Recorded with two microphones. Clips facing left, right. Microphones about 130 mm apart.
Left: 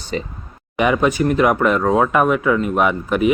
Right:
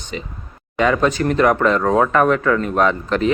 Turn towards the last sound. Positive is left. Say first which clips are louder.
# left 1 dB
turn(degrees=10)  # may be behind; listen again after turning